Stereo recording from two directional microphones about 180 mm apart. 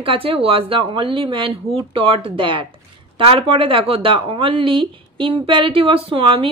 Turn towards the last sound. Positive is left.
turn(degrees=-30)  # may be behind; listen again after turning